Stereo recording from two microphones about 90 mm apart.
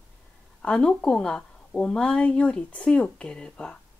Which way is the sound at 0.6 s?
10° left (ahead or behind).